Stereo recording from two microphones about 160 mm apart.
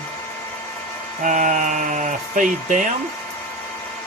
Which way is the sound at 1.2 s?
50° right (ahead or behind).